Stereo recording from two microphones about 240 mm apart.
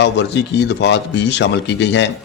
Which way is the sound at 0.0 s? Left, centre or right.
Left.